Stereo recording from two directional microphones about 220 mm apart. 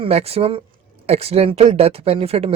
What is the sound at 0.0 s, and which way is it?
Speech, 25° right (ahead or behind).